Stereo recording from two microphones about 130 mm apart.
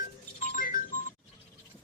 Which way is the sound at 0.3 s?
90° left.